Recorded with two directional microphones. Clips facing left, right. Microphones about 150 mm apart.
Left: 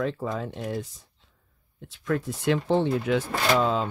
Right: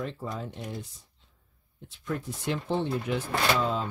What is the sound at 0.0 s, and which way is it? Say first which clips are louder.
Speech: left 6 dB; 90° left.